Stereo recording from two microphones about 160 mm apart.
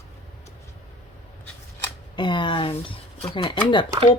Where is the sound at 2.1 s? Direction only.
30° left (ahead or behind).